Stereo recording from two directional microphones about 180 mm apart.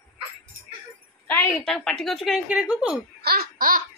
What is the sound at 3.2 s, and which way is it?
Laughter, 60° right (ahead or behind).